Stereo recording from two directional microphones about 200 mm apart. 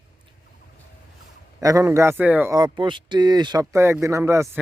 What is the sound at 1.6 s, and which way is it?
A man's voice, 15° right (ahead or behind).